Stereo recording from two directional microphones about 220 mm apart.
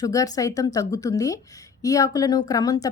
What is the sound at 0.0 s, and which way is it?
Speech, 15° left (ahead or behind).